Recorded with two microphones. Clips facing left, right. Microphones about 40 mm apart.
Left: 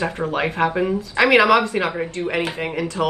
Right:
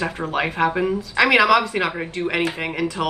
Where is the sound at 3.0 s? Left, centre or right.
Centre.